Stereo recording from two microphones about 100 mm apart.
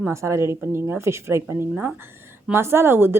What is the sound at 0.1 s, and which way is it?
A woman's voice, 30° right (ahead or behind).